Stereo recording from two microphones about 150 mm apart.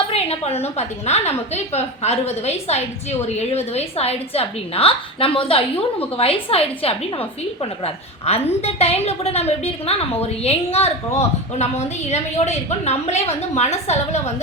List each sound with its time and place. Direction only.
0.1 s a woman's voice: 40° left (ahead or behind)